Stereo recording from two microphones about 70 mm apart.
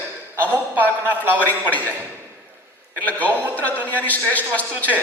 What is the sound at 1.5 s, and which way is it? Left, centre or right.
Speech, left.